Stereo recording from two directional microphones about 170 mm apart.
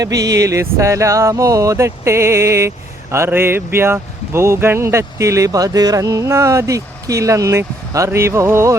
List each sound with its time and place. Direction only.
0.0 s music: 20° right (ahead or behind)